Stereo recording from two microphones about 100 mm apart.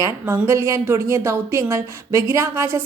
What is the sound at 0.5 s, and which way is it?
A woman's voice, 30° right (ahead or behind).